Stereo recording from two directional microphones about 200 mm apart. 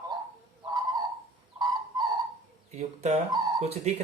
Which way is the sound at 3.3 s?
20° right (ahead or behind).